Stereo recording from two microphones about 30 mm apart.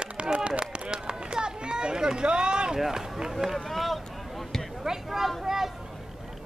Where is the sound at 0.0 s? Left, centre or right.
Right.